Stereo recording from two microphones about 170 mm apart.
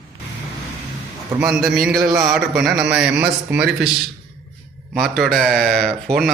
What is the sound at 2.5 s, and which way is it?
A man's voice, 5° right (ahead or behind).